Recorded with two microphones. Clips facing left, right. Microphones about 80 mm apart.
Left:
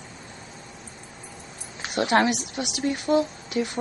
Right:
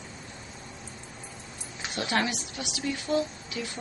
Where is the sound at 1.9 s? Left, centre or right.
Left.